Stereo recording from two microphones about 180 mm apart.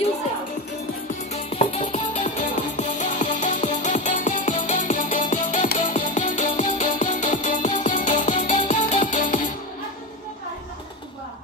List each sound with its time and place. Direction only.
1.3 s music: 35° left (ahead or behind)
2.3 s music: 40° left (ahead or behind)